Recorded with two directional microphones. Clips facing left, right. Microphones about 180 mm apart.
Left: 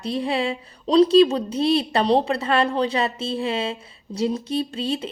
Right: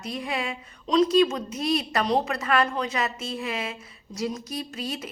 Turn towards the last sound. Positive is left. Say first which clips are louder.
# left 7 dB
turn(degrees=30)  # may be behind; listen again after turning